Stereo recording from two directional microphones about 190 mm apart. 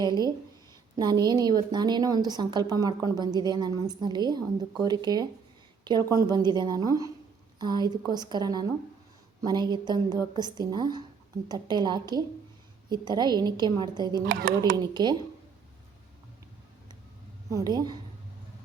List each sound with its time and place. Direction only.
0.0 s a woman's voice: 20° right (ahead or behind)
17.5 s a woman's voice: 20° right (ahead or behind)